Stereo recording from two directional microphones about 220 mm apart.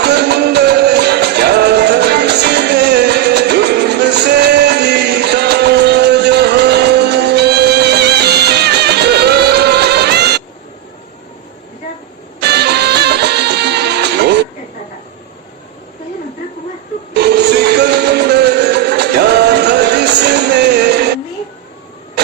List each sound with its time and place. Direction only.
0.0 s music: 50° right (ahead or behind)
12.4 s music: 50° right (ahead or behind)
17.2 s music: 50° right (ahead or behind)